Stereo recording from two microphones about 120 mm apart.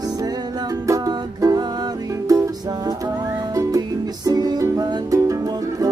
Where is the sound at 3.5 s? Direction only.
30° right (ahead or behind).